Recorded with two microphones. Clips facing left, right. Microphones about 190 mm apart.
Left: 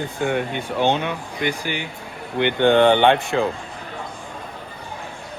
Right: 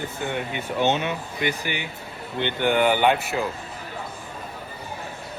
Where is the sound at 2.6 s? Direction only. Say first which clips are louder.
Left 5 dB; 25° left (ahead or behind).